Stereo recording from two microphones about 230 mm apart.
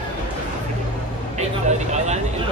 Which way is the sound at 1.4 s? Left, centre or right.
Right.